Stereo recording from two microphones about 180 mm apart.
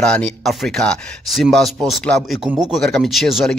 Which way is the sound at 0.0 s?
5° left (ahead or behind).